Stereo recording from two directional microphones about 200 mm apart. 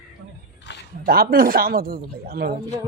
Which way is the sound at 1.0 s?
50° right (ahead or behind).